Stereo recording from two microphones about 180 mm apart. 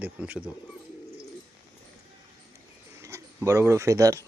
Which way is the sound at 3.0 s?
15° right (ahead or behind).